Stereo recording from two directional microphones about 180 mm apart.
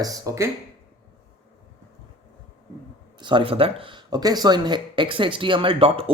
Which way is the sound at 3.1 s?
25° right (ahead or behind).